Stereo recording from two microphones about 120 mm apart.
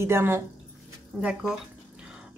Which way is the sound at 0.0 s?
20° right (ahead or behind).